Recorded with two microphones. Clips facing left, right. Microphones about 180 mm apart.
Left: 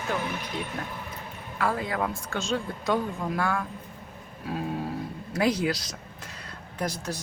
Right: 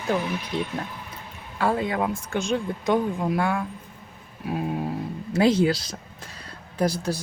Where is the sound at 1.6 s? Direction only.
25° right (ahead or behind).